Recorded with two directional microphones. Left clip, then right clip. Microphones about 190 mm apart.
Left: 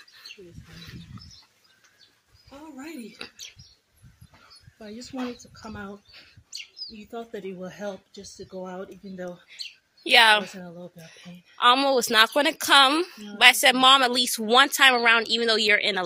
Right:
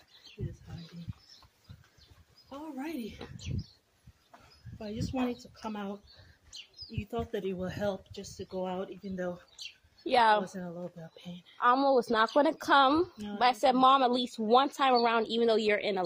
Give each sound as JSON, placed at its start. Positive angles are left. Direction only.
{"t": 7.4, "sound": "speech", "side_deg": -35}
{"t": 8.1, "sound": "speech", "side_deg": -25}
{"t": 10.0, "sound": "speech", "side_deg": -10}
{"t": 10.5, "sound": "speech", "side_deg": -25}
{"t": 11.5, "sound": "a sound", "side_deg": 15}
{"t": 12.0, "sound": "speech", "side_deg": 15}
{"t": 12.6, "sound": "speech", "side_deg": -10}